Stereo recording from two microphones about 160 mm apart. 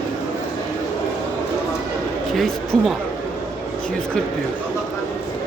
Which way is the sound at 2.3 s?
Centre (ahead or behind).